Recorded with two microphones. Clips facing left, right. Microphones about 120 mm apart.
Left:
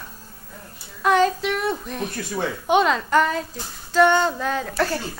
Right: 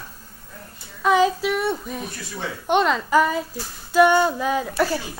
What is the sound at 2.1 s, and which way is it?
Speech, 50° left (ahead or behind).